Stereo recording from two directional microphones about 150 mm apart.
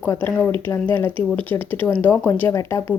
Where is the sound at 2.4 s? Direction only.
20° left (ahead or behind).